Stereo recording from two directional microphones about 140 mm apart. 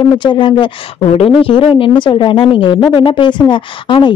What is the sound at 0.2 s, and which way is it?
Speech, 35° left (ahead or behind).